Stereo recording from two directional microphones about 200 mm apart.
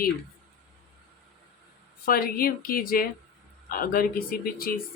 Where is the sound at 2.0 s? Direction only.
45° left (ahead or behind).